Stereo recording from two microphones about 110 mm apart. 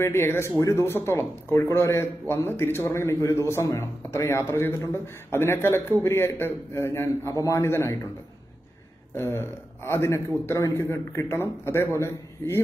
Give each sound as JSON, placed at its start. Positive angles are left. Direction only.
{"t": 0.0, "sound": "speech", "side_deg": 25}
{"t": 9.1, "sound": "speech", "side_deg": 20}